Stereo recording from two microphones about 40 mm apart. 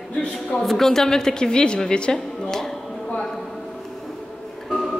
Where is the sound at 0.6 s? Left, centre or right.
Centre.